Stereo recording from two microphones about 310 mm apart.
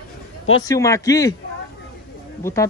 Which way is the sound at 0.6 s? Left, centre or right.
Centre.